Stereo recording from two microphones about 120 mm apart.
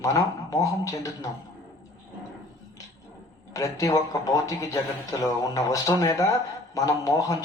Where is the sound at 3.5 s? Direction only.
30° left (ahead or behind).